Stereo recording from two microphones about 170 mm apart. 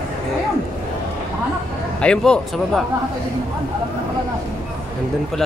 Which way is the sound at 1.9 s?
5° left (ahead or behind).